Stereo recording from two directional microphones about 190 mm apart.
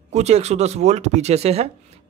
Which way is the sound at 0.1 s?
35° right (ahead or behind).